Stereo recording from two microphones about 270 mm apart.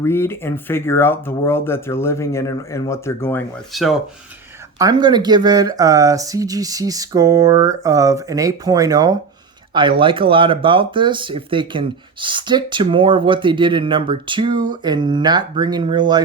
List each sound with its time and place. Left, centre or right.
0.0 s speech: centre
4.8 s speech: centre